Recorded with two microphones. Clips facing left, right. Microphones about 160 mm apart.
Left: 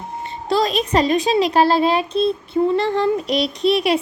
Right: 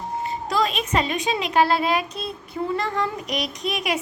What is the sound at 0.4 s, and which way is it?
A child's voice, 35° left (ahead or behind).